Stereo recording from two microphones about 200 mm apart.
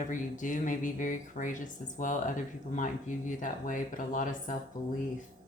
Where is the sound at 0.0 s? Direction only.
40° left (ahead or behind).